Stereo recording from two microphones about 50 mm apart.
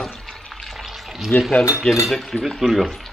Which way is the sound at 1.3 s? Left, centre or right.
Left.